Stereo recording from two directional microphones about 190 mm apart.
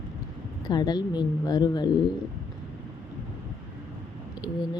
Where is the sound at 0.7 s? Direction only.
20° left (ahead or behind).